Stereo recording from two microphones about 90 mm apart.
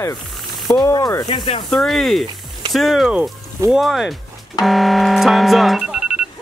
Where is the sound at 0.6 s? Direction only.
45° left (ahead or behind).